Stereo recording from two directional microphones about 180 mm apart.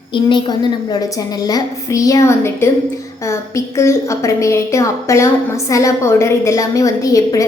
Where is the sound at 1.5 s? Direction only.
20° left (ahead or behind).